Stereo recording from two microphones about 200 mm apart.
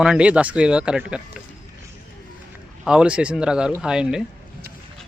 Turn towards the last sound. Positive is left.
turn(degrees=-5)  # may be behind; listen again after turning